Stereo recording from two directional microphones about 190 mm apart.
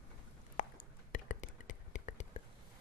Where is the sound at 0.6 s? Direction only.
40° left (ahead or behind).